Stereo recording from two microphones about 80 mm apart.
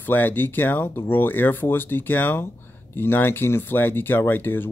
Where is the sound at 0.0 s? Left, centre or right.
Left.